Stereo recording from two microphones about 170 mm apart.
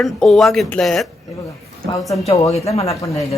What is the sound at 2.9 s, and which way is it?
Speech, 20° left (ahead or behind).